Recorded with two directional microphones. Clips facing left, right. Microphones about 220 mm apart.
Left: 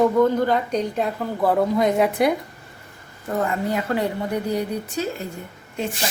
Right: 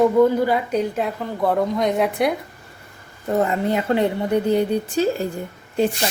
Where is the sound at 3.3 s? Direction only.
25° right (ahead or behind).